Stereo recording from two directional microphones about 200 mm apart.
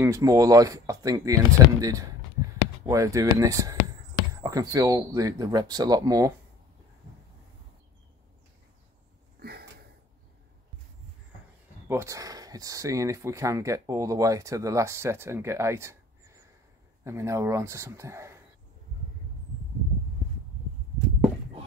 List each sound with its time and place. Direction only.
0.0 s speech: 15° right (ahead or behind)
9.4 s sniff: 50° right (ahead or behind)
11.9 s speech: 15° right (ahead or behind)